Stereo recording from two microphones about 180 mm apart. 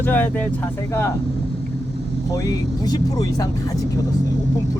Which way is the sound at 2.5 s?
20° left (ahead or behind).